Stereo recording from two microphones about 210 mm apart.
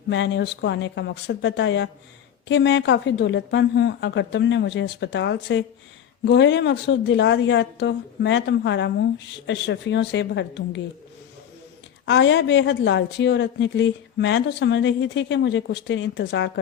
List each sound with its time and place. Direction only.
0.1 s a woman's voice: 55° left (ahead or behind)
12.0 s a woman's voice: 60° left (ahead or behind)